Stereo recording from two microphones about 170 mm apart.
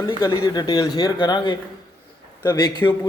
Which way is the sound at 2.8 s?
10° left (ahead or behind).